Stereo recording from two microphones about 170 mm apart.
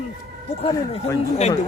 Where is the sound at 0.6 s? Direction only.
20° left (ahead or behind).